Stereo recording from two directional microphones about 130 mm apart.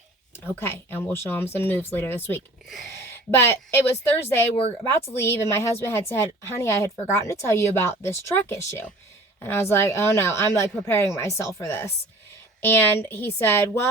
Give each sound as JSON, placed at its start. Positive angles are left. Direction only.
{"t": 0.3, "sound": "speech", "side_deg": 20}